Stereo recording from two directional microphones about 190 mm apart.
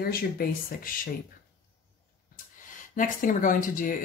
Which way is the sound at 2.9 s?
45° left (ahead or behind).